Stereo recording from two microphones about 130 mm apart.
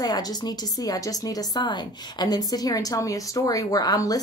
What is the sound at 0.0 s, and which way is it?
Speech, 30° left (ahead or behind).